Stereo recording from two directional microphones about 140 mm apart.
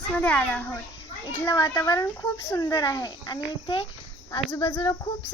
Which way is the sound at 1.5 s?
25° left (ahead or behind).